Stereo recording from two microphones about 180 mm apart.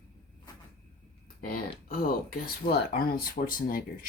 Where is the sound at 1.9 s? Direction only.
55° left (ahead or behind).